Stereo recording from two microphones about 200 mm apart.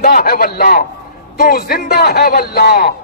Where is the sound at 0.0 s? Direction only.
45° left (ahead or behind).